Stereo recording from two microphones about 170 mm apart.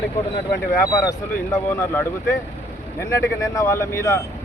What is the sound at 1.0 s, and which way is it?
Speech, 15° left (ahead or behind).